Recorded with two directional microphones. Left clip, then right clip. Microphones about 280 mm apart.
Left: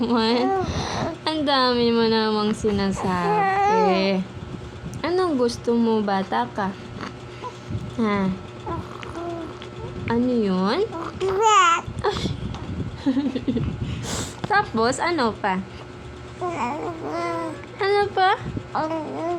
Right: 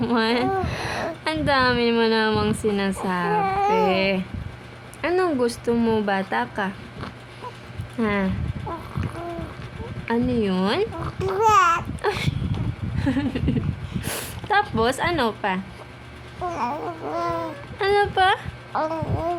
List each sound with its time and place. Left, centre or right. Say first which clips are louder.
0.0 s a woman's voice: left 1 dB; right
0.6 s a sound: left 1 dB; right
1.2 s a woman's voice: even; right
3.3 s a sound: left 2 dB; centre
3.9 s a woman's voice: even; centre
7.9 s a woman's voice: even; right
10.1 s a woman's voice: left 1 dB; right
11.0 s babbling: left 1 dB; centre
12.0 s a woman's voice: even; right
16.6 s babbling: right 1 dB; centre
17.8 s a woman's voice: even; right
18.7 s babbling: right 1 dB; centre